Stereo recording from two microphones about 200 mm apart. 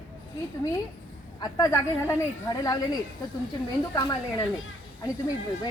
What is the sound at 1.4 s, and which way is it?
Speech, 20° left (ahead or behind).